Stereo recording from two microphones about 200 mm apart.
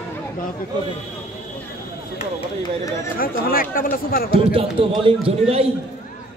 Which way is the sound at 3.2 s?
45° left (ahead or behind).